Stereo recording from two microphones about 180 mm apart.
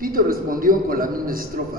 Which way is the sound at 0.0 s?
50° right (ahead or behind).